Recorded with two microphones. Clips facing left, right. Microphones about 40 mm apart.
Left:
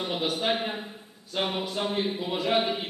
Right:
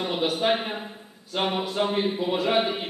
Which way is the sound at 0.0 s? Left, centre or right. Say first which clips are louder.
Right 4 dB; centre.